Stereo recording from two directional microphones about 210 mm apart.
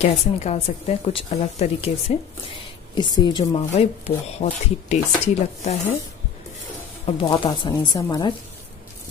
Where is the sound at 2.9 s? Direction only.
20° left (ahead or behind).